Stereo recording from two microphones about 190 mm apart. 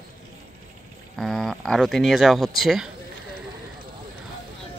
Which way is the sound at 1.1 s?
Centre (ahead or behind).